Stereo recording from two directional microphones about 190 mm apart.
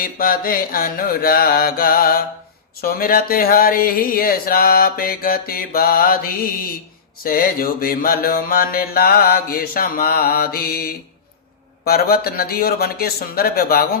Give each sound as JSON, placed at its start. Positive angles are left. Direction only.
{"t": 0.0, "sound": "speech", "side_deg": 50}